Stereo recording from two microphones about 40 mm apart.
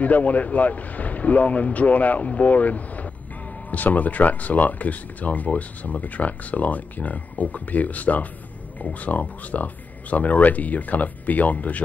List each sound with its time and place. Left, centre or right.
0.0 s speech: left